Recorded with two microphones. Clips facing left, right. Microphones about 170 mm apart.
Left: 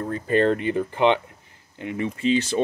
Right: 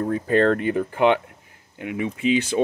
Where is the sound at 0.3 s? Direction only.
5° left (ahead or behind).